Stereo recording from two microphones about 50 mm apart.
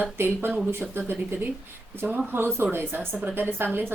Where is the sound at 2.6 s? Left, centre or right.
Right.